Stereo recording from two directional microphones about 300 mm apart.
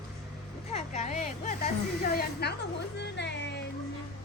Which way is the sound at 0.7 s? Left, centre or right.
Left.